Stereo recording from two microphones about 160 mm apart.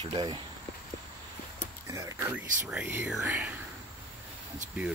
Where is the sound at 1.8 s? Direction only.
20° right (ahead or behind).